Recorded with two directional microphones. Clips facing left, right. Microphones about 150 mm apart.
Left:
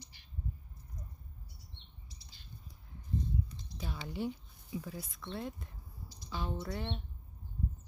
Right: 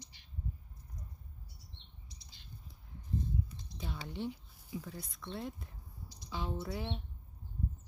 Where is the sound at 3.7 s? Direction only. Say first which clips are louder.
Left 1 dB; 20° right (ahead or behind).